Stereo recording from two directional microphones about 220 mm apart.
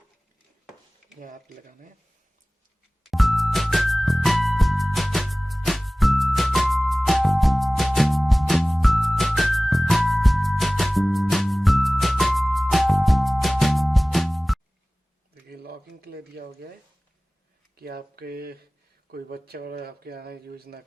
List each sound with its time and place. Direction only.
3.1 s music: centre (ahead or behind)
15.4 s a sound: 45° right (ahead or behind)
17.7 s speech: 45° right (ahead or behind)